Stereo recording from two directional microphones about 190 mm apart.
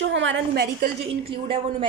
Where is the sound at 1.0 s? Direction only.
30° right (ahead or behind).